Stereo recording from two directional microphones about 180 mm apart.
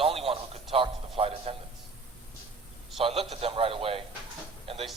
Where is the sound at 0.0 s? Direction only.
30° right (ahead or behind).